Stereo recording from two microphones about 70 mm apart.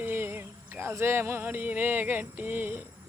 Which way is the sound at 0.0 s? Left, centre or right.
Right.